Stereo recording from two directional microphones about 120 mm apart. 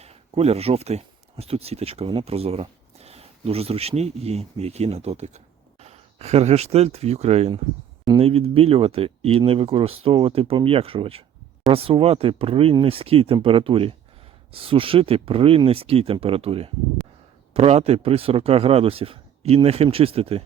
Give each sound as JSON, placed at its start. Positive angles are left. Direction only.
{"t": 0.0, "sound": "speech", "side_deg": -60}
{"t": 8.0, "sound": "speech", "side_deg": -50}